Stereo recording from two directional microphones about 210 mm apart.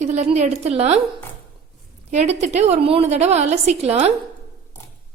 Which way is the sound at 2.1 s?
35° right (ahead or behind).